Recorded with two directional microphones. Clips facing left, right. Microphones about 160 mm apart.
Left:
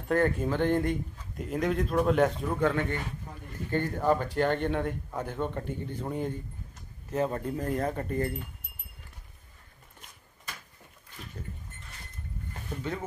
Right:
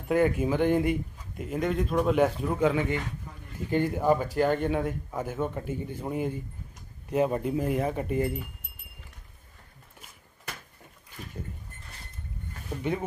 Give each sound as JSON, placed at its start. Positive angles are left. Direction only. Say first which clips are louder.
{"t": 0.1, "sound": "speech", "louder": "right 2 dB", "side_deg": -10}
{"t": 12.6, "sound": "speech", "louder": "right 5 dB", "side_deg": -10}